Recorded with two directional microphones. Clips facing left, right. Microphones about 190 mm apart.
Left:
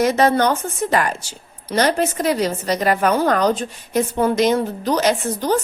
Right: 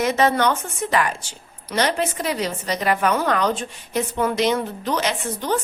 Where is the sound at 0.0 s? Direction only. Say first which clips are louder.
Left 3 dB; 40° left (ahead or behind).